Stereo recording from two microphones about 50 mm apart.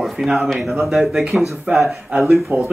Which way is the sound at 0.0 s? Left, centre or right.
Centre.